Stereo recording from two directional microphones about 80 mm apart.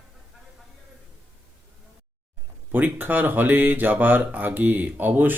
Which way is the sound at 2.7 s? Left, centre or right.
Right.